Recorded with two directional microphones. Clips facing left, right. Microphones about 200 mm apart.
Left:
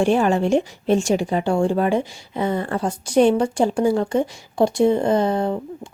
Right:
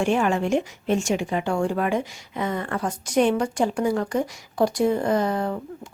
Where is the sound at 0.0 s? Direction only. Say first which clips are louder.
Left 4 dB; 35° left (ahead or behind).